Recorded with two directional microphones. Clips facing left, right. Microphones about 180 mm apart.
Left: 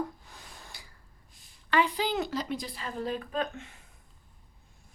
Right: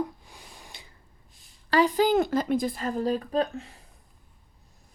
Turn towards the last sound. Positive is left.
turn(degrees=-35)  # may be behind; listen again after turning